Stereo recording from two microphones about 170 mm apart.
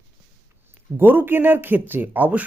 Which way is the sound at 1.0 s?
10° right (ahead or behind).